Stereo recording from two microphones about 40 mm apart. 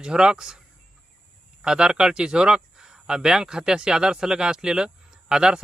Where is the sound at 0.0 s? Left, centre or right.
Centre.